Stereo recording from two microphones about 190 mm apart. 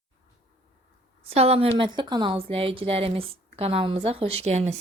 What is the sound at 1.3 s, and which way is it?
A woman's voice, 30° right (ahead or behind).